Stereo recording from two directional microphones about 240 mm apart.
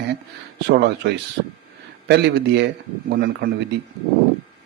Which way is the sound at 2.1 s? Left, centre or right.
Right.